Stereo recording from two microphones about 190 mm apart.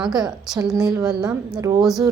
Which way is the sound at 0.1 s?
20° right (ahead or behind).